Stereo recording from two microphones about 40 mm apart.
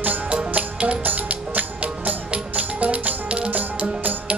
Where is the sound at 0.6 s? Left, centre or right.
Right.